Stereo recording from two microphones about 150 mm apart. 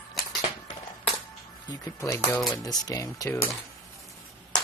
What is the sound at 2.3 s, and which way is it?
Speech, 5° left (ahead or behind).